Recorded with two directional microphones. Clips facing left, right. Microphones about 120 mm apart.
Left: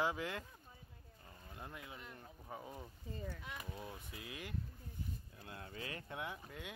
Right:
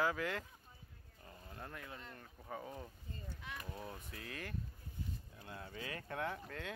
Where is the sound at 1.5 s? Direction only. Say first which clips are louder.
Right 1 dB; 15° left (ahead or behind).